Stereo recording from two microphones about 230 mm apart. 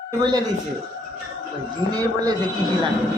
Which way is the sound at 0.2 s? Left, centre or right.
Centre.